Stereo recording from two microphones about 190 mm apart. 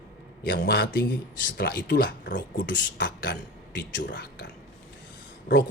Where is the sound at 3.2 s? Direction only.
70° left (ahead or behind).